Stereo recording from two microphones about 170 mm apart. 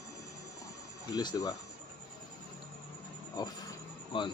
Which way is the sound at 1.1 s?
25° left (ahead or behind).